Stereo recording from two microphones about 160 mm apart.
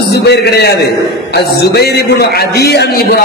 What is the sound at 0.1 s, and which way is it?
A man's voice, 90° left.